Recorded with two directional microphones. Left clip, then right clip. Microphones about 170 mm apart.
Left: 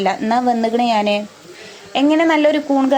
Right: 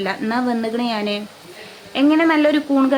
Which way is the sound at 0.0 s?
25° left (ahead or behind).